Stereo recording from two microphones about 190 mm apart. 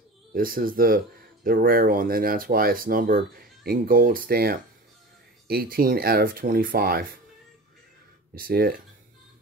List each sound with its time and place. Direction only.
0.3 s speech: 50° right (ahead or behind)
8.4 s speech: 50° right (ahead or behind)